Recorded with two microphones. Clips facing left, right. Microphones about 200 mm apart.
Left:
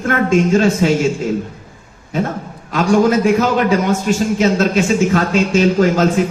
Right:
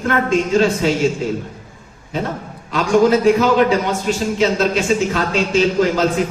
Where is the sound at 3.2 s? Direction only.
45° left (ahead or behind).